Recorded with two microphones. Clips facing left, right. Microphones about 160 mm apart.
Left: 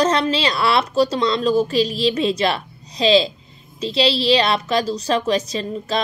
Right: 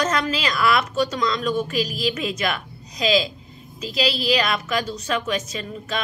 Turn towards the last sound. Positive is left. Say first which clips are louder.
# left 6 dB
turn(degrees=35)  # may be behind; listen again after turning